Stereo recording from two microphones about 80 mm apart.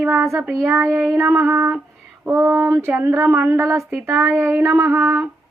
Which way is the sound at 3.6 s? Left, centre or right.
Right.